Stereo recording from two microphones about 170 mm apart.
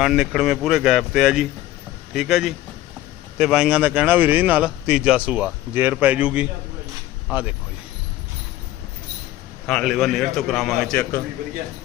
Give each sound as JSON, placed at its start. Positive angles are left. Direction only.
{"t": 0.0, "sound": "a man's voice", "side_deg": -5}
{"t": 9.6, "sound": "a man's voice", "side_deg": 0}